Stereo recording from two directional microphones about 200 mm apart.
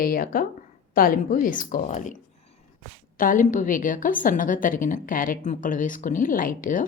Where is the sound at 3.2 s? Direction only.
40° left (ahead or behind).